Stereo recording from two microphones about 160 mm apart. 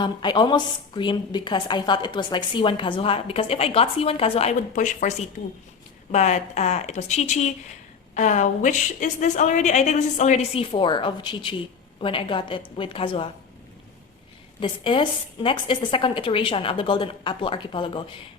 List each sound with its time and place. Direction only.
0.0 s a woman's voice: 30° left (ahead or behind)
14.6 s a woman's voice: 30° left (ahead or behind)